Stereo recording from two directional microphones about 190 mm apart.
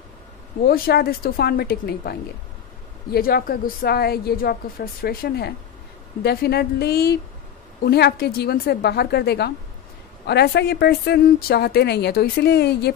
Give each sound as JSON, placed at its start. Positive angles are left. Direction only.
{"t": 0.7, "sound": "a woman's voice", "side_deg": 55}